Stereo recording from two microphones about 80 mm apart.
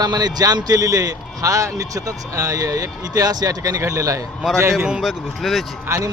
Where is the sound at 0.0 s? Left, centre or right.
Right.